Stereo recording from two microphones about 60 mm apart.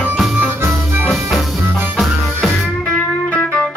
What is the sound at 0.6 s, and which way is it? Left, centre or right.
Music, right.